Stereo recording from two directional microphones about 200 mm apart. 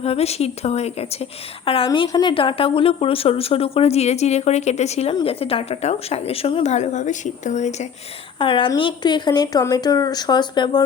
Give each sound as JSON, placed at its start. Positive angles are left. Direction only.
{"t": 0.0, "sound": "a woman's voice", "side_deg": 30}
{"t": 8.4, "sound": "a woman's voice", "side_deg": 25}